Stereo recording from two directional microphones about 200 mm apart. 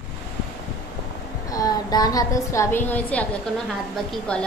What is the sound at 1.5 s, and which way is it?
A woman's voice, 20° left (ahead or behind).